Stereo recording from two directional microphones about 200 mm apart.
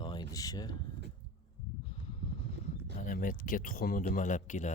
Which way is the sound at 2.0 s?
30° left (ahead or behind).